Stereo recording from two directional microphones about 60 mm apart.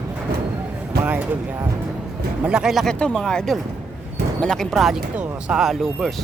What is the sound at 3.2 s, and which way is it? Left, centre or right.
Speech, centre.